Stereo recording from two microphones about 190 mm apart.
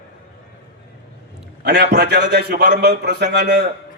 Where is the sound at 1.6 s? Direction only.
55° right (ahead or behind).